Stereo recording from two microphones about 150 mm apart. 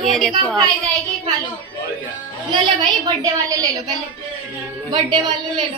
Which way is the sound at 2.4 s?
30° right (ahead or behind).